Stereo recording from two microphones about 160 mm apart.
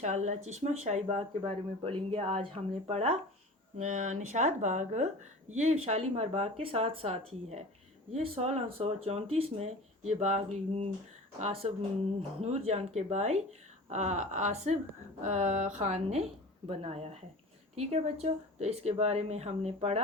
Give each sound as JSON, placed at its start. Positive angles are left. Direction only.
{"t": 0.0, "sound": "speech", "side_deg": -45}
{"t": 1.4, "sound": "speech", "side_deg": -35}